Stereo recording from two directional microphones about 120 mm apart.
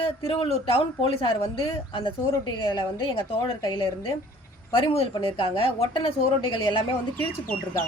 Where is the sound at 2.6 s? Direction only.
40° left (ahead or behind).